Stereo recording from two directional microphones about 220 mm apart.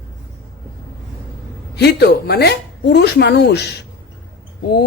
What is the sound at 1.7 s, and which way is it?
Speech, 50° left (ahead or behind).